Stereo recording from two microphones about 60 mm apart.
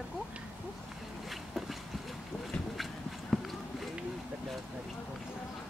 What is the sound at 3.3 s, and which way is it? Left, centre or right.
Run, centre.